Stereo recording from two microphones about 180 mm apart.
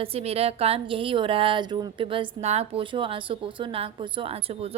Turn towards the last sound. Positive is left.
turn(degrees=-35)  # may be behind; listen again after turning